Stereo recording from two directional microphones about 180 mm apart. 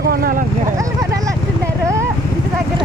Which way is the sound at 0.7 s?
20° right (ahead or behind).